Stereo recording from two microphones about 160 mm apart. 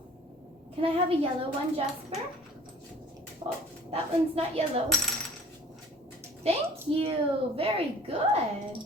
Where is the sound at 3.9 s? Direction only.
40° right (ahead or behind).